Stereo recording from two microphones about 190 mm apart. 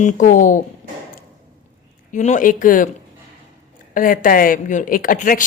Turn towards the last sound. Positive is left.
turn(degrees=45)  # may be behind; listen again after turning